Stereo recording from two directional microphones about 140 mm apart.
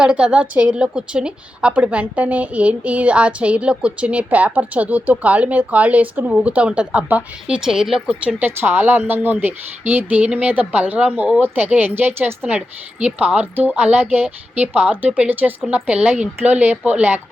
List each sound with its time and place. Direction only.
0.0 s a woman's voice: 5° right (ahead or behind)